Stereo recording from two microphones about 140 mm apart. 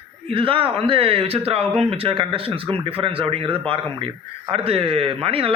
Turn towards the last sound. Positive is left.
turn(degrees=-40)  # may be behind; listen again after turning